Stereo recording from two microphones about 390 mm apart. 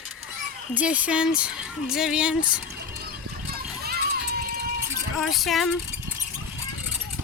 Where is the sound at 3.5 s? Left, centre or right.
Right.